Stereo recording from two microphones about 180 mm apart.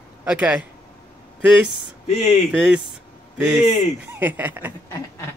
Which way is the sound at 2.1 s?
40° left (ahead or behind).